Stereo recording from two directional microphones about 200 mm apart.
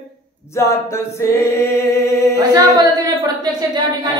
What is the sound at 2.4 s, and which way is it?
A woman's voice, 20° right (ahead or behind).